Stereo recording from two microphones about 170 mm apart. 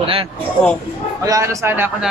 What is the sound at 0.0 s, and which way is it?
Speech, 35° right (ahead or behind).